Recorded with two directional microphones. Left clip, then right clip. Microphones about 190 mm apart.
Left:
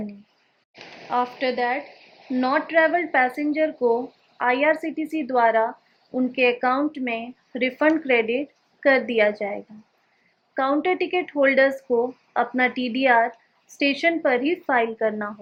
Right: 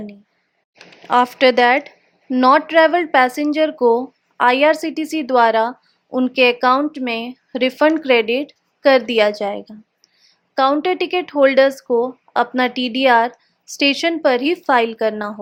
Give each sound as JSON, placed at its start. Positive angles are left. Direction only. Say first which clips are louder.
{"t": 1.1, "sound": "speech", "louder": "right 10 dB", "side_deg": -35}